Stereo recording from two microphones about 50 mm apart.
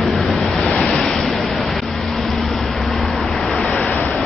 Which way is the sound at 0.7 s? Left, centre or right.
Centre.